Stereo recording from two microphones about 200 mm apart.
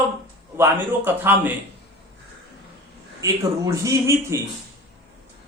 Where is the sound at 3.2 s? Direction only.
15° right (ahead or behind).